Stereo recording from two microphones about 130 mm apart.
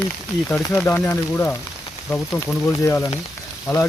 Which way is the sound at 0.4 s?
15° left (ahead or behind).